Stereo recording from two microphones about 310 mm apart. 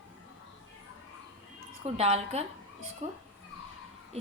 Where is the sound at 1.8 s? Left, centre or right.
Centre.